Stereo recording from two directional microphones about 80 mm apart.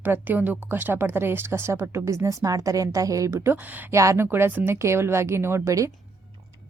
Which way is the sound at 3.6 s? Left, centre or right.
Right.